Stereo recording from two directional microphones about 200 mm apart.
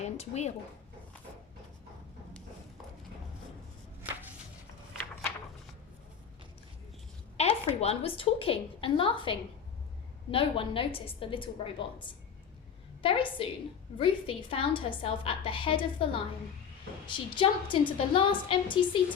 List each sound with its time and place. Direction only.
0.0 s speech: 35° left (ahead or behind)
7.3 s a sound: 30° left (ahead or behind)
7.8 s a woman's voice: 30° left (ahead or behind)